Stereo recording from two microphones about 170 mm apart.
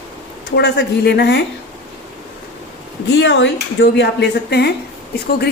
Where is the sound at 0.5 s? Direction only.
85° left.